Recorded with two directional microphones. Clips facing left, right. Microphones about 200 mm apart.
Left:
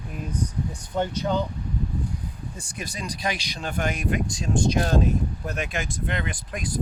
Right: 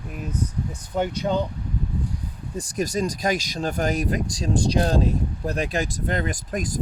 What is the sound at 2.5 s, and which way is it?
Speech, 40° right (ahead or behind).